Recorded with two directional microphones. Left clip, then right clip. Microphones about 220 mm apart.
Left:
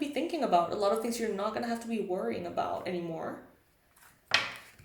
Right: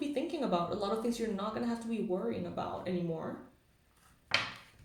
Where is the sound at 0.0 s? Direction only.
35° left (ahead or behind).